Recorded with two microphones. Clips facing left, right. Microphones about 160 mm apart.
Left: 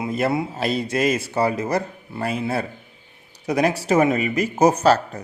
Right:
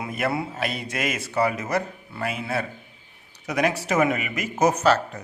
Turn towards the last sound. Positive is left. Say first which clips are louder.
# left 3 dB
turn(degrees=35)  # may be behind; listen again after turning